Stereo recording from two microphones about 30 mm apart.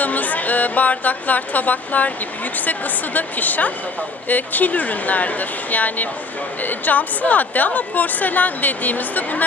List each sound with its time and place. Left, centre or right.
0.0 s a woman's voice: left